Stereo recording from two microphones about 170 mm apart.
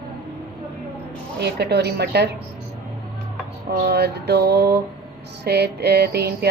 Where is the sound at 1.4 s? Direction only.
80° right.